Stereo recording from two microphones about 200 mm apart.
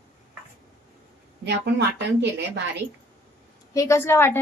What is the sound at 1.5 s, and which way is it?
A woman's voice, 55° right (ahead or behind).